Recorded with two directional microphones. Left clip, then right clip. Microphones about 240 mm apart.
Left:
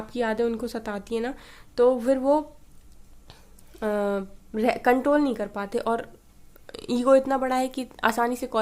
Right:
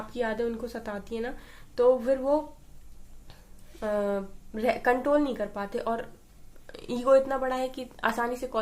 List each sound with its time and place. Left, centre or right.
0.1 s a woman's voice: left
3.8 s a woman's voice: left